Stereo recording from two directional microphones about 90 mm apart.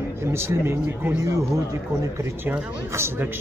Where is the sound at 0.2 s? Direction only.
30° right (ahead or behind).